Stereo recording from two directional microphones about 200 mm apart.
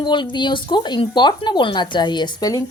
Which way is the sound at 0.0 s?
25° left (ahead or behind).